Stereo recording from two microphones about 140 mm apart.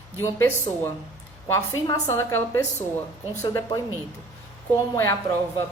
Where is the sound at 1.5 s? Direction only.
20° left (ahead or behind).